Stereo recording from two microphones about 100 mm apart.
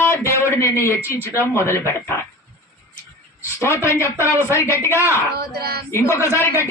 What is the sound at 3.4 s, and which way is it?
Speech, 30° left (ahead or behind).